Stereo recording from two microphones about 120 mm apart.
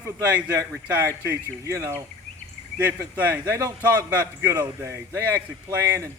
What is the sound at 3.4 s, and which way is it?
A man's voice, 30° right (ahead or behind).